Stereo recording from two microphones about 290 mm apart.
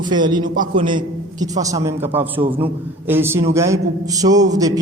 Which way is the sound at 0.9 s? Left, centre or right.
Centre.